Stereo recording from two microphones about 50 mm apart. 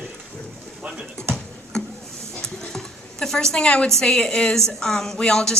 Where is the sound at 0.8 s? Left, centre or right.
Centre.